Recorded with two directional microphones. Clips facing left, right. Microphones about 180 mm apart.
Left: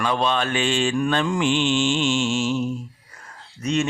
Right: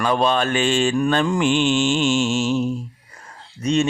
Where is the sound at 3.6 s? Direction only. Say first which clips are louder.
Right 3 dB; 30° right (ahead or behind).